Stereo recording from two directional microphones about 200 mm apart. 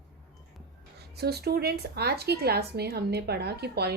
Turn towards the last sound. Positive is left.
turn(degrees=-55)  # may be behind; listen again after turning